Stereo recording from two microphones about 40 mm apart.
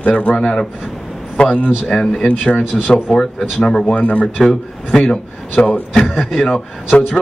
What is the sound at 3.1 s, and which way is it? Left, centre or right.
Speech, centre.